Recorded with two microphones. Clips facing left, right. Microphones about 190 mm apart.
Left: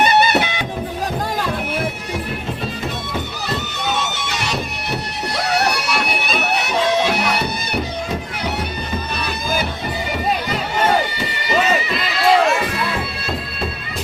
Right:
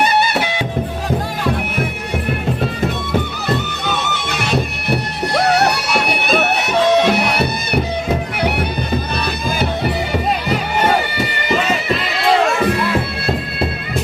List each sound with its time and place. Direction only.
4.1 s music: 55° right (ahead or behind)
6.2 s bagpipes: 55° right (ahead or behind)